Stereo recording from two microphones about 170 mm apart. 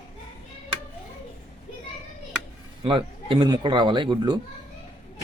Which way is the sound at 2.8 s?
30° right (ahead or behind).